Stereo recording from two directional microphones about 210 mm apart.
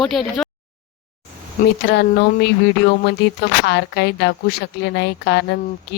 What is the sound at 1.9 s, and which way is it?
Speech, 50° left (ahead or behind).